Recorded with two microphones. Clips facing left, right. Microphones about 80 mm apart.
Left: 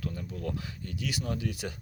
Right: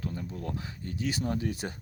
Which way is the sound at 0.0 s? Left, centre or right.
Right.